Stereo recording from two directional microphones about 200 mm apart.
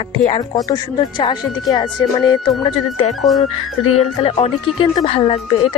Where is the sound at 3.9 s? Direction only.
30° left (ahead or behind).